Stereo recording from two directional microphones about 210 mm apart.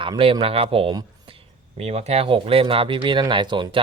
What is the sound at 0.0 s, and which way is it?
Speech, 25° right (ahead or behind).